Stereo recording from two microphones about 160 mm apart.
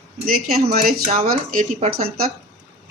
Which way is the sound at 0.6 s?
70° right (ahead or behind).